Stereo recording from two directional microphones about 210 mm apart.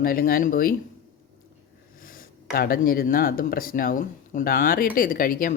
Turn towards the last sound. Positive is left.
turn(degrees=40)  # may be behind; listen again after turning